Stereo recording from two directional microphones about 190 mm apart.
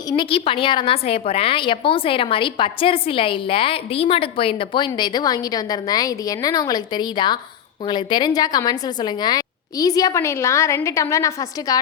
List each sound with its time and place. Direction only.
0.1 s a woman's voice: 25° left (ahead or behind)